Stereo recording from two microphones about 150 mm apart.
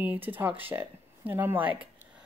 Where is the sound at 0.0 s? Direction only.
10° right (ahead or behind).